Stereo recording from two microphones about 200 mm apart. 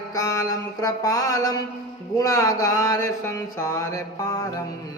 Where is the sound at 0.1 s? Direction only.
15° left (ahead or behind).